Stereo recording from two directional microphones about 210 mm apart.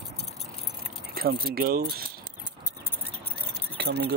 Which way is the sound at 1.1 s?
45° right (ahead or behind).